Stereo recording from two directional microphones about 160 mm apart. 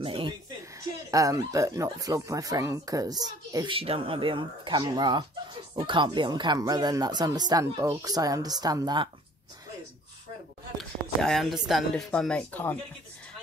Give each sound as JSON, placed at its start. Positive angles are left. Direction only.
{"t": 0.0, "sound": "a sound", "side_deg": -35}
{"t": 0.7, "sound": "speech", "side_deg": -20}
{"t": 3.5, "sound": "speech", "side_deg": -35}
{"t": 10.8, "sound": "speech", "side_deg": 0}